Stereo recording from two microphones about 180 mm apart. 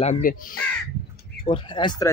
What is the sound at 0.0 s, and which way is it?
Speech, 45° left (ahead or behind).